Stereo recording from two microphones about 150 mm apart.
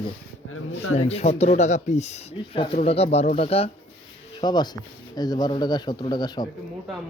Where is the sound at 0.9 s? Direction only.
45° left (ahead or behind).